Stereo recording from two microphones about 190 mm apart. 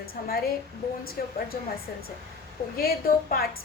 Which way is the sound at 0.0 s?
50° left (ahead or behind).